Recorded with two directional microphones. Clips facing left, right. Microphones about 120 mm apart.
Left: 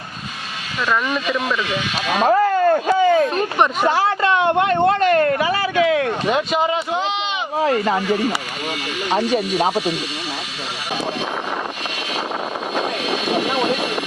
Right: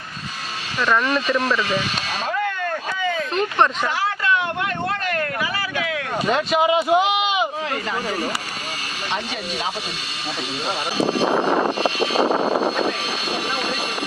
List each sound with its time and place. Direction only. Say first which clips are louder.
0.9 s speech: right 1 dB; 5° left (ahead or behind)
2.0 s speech: left 9 dB; 50° left (ahead or behind)
2.4 s a sound: left 9 dB; 35° left (ahead or behind)
3.8 s speech: left 5 dB; 30° left (ahead or behind)
6.3 s speech: right 4 dB; centre (ahead or behind)
7.6 s speech: left 8 dB; 40° left (ahead or behind)
9.0 s speech: left 9 dB; 35° left (ahead or behind)
11.2 s vehicle: right 6 dB; 35° right (ahead or behind)